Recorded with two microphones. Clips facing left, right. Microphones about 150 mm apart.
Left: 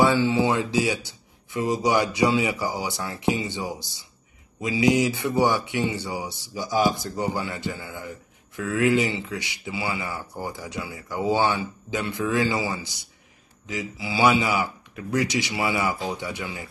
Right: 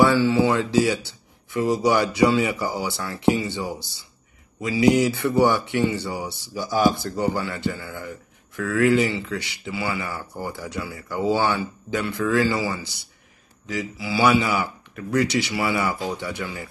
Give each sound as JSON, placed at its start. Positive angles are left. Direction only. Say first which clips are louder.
{"t": 0.0, "sound": "speech", "louder": "right 2 dB", "side_deg": 20}